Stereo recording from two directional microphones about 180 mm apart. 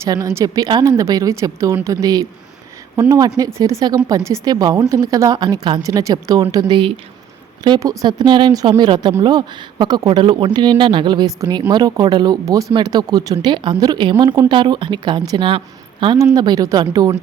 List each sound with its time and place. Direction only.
0.0 s a woman's voice: 15° right (ahead or behind)